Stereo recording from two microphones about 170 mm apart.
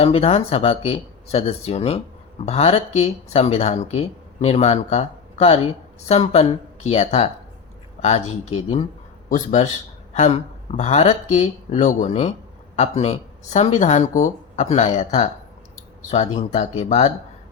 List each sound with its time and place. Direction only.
0.0 s speech: 35° left (ahead or behind)